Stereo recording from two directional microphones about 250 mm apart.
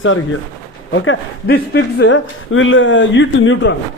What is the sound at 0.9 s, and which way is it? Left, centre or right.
Speech, left.